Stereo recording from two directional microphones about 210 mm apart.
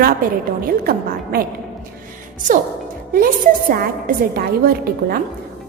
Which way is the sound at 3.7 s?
45° right (ahead or behind).